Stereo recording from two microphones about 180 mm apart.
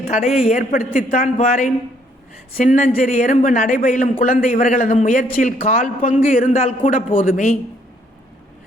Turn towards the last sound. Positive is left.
turn(degrees=45)  # may be behind; listen again after turning